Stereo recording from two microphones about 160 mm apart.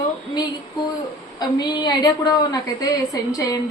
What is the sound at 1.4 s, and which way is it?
A woman's voice, 25° left (ahead or behind).